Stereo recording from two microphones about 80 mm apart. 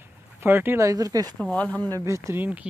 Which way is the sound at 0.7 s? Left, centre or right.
Right.